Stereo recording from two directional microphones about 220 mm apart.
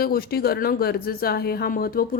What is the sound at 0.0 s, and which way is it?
A woman's voice, 45° left (ahead or behind).